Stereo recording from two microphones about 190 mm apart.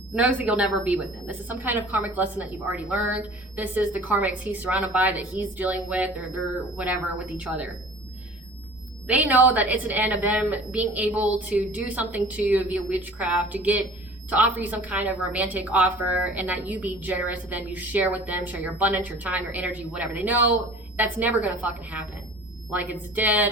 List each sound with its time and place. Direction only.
0.1 s a woman's voice: 5° right (ahead or behind)
9.0 s a woman's voice: 10° right (ahead or behind)